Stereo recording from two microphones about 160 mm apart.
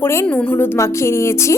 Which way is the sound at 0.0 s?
15° left (ahead or behind).